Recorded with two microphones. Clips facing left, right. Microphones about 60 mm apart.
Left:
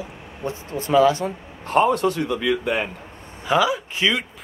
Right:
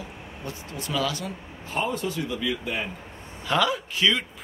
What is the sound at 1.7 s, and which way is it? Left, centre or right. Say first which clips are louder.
Speech: left 10 dB; left.